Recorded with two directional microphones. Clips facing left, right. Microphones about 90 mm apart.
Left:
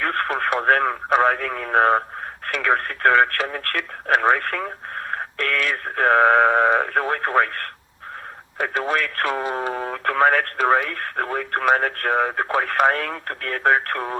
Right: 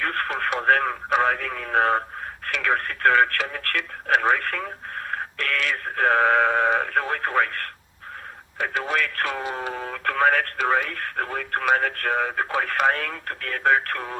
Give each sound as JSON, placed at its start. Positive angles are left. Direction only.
{"t": 0.0, "sound": "radio", "side_deg": 40}
{"t": 2.5, "sound": "speech", "side_deg": 40}